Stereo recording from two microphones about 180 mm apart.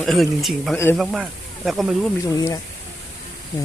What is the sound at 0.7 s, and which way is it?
Speech, 15° left (ahead or behind).